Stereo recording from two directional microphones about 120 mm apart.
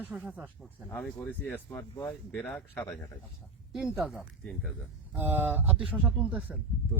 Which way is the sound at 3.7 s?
Centre (ahead or behind).